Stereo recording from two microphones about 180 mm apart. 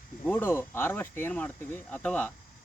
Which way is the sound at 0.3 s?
10° left (ahead or behind).